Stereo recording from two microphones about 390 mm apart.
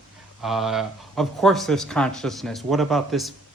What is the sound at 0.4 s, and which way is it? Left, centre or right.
Speech, centre.